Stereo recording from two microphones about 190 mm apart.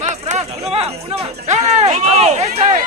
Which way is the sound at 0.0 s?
35° right (ahead or behind).